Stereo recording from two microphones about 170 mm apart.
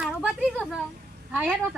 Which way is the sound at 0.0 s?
5° right (ahead or behind).